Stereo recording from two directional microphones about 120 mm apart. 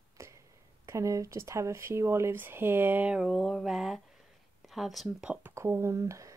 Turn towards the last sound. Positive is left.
turn(degrees=-25)  # may be behind; listen again after turning